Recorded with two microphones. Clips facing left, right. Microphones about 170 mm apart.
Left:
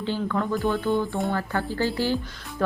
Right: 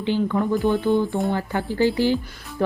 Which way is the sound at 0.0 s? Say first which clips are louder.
Right 5 dB; 15° right (ahead or behind).